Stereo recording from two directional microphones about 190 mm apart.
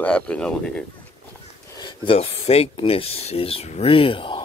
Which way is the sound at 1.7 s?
25° left (ahead or behind).